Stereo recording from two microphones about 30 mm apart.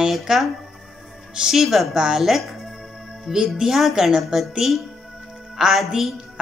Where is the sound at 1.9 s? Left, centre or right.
Centre.